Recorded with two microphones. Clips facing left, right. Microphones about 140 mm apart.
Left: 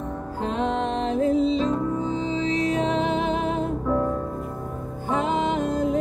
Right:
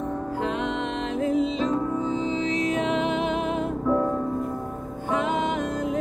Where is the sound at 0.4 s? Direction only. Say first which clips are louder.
Left 5 dB; 35° left (ahead or behind).